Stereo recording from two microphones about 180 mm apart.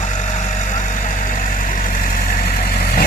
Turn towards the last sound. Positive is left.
turn(degrees=55)  # may be behind; listen again after turning